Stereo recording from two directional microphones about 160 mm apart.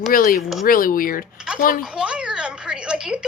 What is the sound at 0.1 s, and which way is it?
Speech, 60° left (ahead or behind).